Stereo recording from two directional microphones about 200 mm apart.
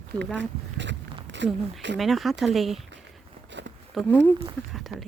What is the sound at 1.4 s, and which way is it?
Speech, 65° right (ahead or behind).